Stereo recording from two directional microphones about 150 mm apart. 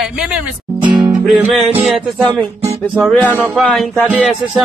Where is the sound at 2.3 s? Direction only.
35° right (ahead or behind).